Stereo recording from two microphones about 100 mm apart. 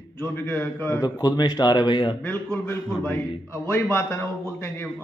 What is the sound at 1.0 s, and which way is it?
A man's voice, 40° left (ahead or behind).